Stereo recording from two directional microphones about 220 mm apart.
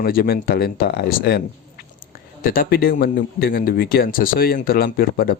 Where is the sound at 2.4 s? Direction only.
40° left (ahead or behind).